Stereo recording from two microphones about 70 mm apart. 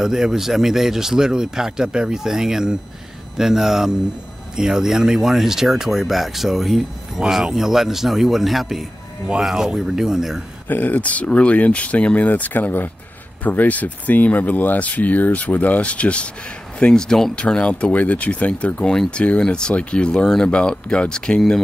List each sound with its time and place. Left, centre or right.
0.0 s speech: centre
10.7 s speech: left